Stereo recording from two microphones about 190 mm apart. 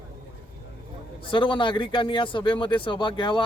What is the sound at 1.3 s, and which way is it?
Speech, 25° left (ahead or behind).